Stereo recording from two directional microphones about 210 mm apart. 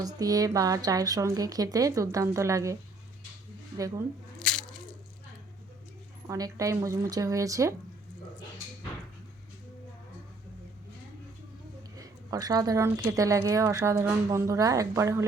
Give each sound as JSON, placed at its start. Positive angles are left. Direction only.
{"t": 0.0, "sound": "a woman's voice", "side_deg": -15}
{"t": 3.8, "sound": "a woman's voice", "side_deg": -15}
{"t": 4.4, "sound": "a sound", "side_deg": 5}
{"t": 6.2, "sound": "a woman's voice", "side_deg": -15}
{"t": 11.9, "sound": "a sound", "side_deg": -15}
{"t": 13.1, "sound": "a woman's voice", "side_deg": -15}